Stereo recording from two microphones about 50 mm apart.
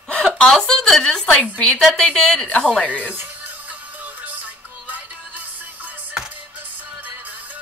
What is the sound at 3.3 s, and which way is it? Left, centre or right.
Music, right.